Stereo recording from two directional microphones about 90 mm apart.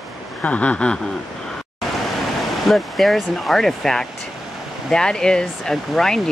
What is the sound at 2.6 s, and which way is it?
Speech, centre (ahead or behind).